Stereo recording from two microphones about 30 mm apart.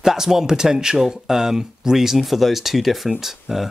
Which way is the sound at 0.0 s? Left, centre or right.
Centre.